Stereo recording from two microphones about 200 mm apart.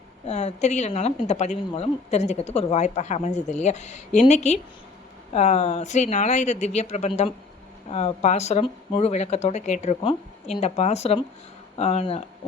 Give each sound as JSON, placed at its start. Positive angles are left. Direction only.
{"t": 0.3, "sound": "a woman's voice", "side_deg": 35}